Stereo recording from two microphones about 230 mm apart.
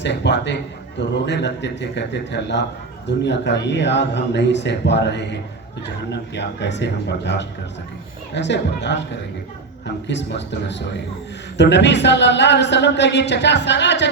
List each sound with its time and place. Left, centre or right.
0.0 s a man's voice: left